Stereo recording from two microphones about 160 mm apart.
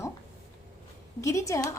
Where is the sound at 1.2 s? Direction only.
20° left (ahead or behind).